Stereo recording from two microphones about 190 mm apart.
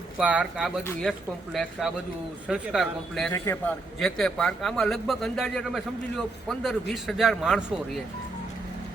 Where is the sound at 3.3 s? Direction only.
15° left (ahead or behind).